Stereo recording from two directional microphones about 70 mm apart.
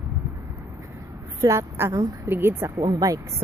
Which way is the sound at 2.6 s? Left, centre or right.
Right.